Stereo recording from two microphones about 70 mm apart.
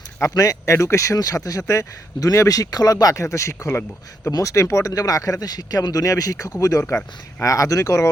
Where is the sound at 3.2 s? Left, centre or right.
Left.